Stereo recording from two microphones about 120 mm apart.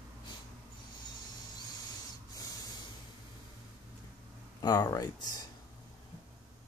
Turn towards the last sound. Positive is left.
turn(degrees=30)  # may be behind; listen again after turning